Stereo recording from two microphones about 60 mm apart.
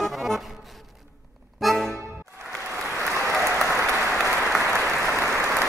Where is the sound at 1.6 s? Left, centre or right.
Centre.